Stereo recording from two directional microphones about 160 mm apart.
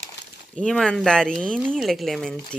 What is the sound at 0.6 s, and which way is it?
Speech, centre (ahead or behind).